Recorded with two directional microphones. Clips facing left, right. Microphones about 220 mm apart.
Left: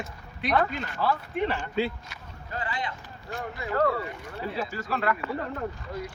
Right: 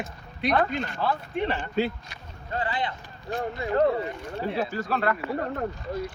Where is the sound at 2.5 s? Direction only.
30° right (ahead or behind).